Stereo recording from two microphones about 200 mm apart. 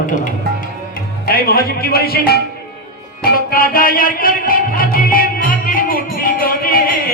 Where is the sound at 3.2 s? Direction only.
50° left (ahead or behind).